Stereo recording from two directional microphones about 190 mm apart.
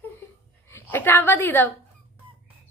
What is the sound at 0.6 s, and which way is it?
A woman's voice, 10° left (ahead or behind).